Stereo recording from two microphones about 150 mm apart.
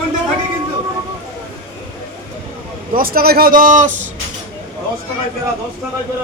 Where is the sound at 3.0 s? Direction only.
80° right; by 3.9 s 60° right (ahead or behind).